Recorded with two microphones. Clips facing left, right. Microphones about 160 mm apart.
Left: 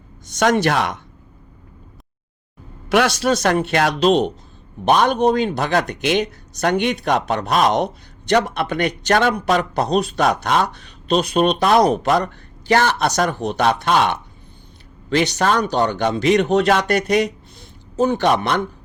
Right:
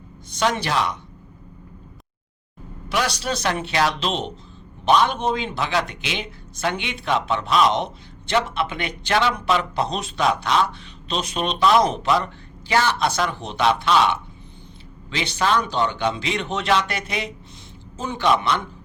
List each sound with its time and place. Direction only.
0.3 s a man's voice: 50° left (ahead or behind)
2.9 s a man's voice: 55° left (ahead or behind)
17.9 s a man's voice: 55° left (ahead or behind)